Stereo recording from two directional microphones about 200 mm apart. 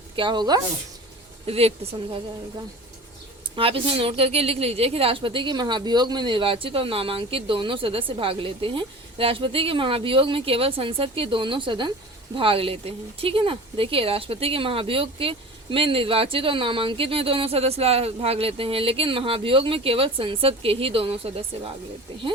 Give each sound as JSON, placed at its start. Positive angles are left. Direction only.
{"t": 0.2, "sound": "speech", "side_deg": -25}
{"t": 3.5, "sound": "speech", "side_deg": -25}